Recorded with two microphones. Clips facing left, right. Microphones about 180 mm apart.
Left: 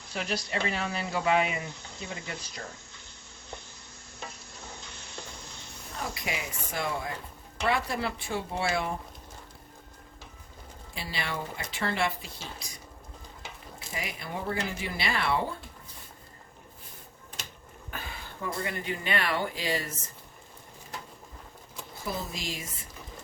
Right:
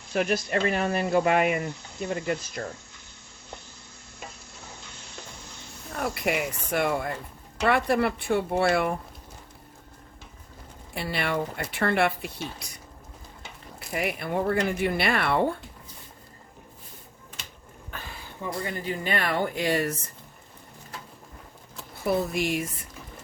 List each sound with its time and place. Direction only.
0.1 s speech: 55° right (ahead or behind)
6.0 s speech: 60° right (ahead or behind)
10.9 s speech: 60° right (ahead or behind)
13.7 s speech: 60° right (ahead or behind)
18.6 s speech: 40° right (ahead or behind); by 20.0 s 60° right (ahead or behind)
22.0 s speech: 60° right (ahead or behind)